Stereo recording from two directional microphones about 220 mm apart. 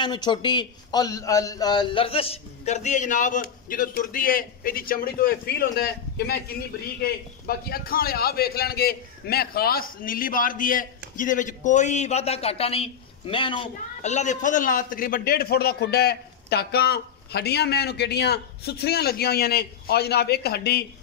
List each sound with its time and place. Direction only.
0.0 s a man's voice: 20° left (ahead or behind); by 20.8 s 45° left (ahead or behind)